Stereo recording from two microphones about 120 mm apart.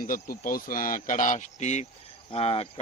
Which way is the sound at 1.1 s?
90° left.